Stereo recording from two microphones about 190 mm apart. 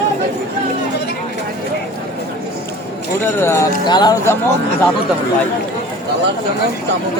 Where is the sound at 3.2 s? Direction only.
15° left (ahead or behind).